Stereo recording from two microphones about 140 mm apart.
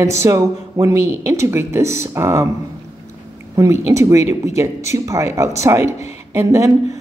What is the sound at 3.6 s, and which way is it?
Speech, 20° right (ahead or behind).